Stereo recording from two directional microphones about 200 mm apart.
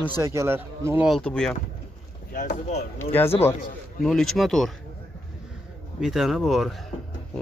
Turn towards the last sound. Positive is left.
turn(degrees=0)  # may be behind; listen again after turning